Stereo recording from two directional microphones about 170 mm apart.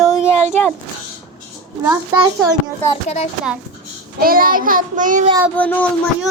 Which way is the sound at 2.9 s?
40° left (ahead or behind).